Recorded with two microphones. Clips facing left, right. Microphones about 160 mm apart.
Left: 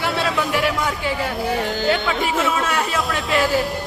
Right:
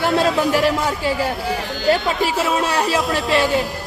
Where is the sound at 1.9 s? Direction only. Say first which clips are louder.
Right 6 dB; 30° right (ahead or behind).